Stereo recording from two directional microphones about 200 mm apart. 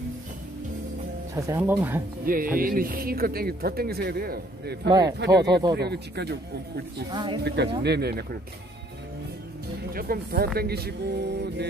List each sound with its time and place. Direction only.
1.3 s speech: 10° right (ahead or behind)
2.2 s speech: 45° right (ahead or behind)
4.8 s speech: 20° right (ahead or behind)
5.2 s speech: 55° right (ahead or behind)
7.1 s speech: 20° right (ahead or behind)
7.4 s speech: 55° right (ahead or behind)
9.9 s speech: 50° right (ahead or behind)